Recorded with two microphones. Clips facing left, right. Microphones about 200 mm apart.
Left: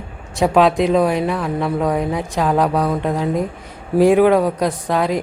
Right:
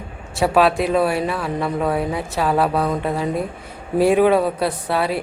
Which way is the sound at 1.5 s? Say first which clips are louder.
Left 1 dB; 5° right (ahead or behind).